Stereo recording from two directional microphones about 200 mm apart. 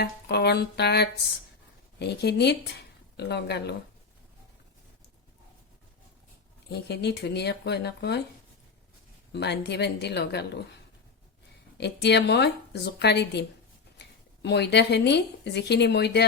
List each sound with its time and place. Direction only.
0.0 s a woman's voice: 55° left (ahead or behind)
6.7 s a woman's voice: 55° left (ahead or behind)
9.3 s a woman's voice: 55° left (ahead or behind)
11.8 s a woman's voice: 55° left (ahead or behind)
14.4 s a woman's voice: 60° left (ahead or behind)